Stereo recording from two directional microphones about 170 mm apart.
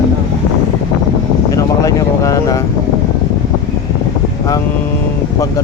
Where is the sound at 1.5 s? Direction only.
20° left (ahead or behind).